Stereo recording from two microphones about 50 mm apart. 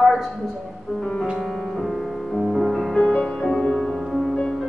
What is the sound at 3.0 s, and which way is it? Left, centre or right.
Music, centre.